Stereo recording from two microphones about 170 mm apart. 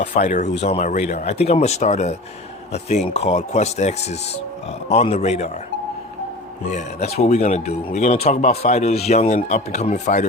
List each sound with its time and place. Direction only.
0.2 s speech: 45° left (ahead or behind)
6.7 s speech: 40° left (ahead or behind)